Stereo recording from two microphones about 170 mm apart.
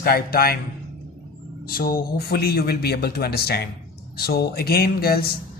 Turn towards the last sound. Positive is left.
turn(degrees=65)  # may be behind; listen again after turning